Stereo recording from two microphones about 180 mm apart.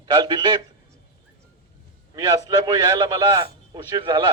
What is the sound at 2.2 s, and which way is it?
A man's voice, 20° right (ahead or behind).